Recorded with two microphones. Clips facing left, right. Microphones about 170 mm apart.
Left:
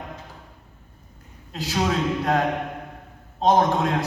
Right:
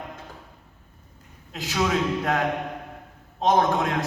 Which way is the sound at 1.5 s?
35° left (ahead or behind).